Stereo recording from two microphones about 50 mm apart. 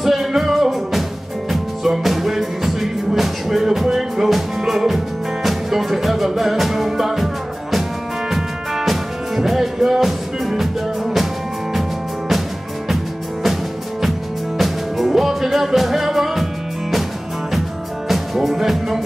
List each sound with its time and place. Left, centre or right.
0.0 s music: centre
8.3 s music: centre
12.8 s music: centre
14.6 s music: centre
17.5 s music: centre